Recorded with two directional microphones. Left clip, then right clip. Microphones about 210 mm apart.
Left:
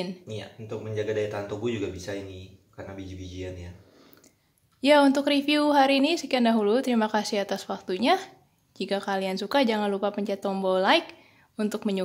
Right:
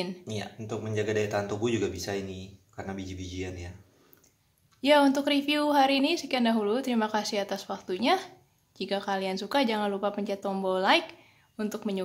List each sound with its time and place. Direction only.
0.3 s speech: 50° right (ahead or behind)
4.8 s a woman's voice: 20° left (ahead or behind)